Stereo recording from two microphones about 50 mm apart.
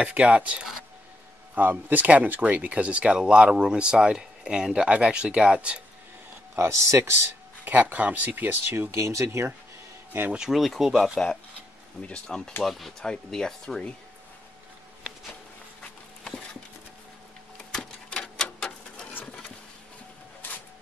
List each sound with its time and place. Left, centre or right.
0.0 s speech: right
6.5 s speech: right
7.6 s speech: right
8.9 s speech: right
10.5 s speech: centre
12.3 s speech: centre
12.6 s speech: centre
13.0 s speech: centre
18.1 s a sound: centre